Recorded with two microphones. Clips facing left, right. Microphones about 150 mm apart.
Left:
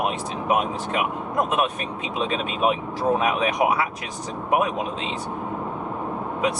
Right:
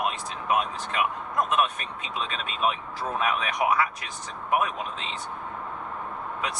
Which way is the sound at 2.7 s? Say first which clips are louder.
Left 8 dB; 15° left (ahead or behind).